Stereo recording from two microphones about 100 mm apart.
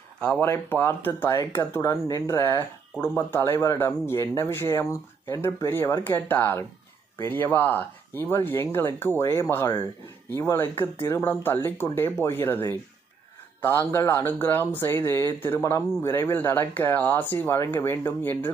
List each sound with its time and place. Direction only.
0.2 s speech: 10° left (ahead or behind)
0.5 s speech: 20° left (ahead or behind)